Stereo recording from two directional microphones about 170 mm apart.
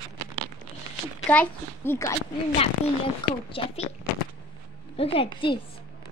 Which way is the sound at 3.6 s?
35° left (ahead or behind).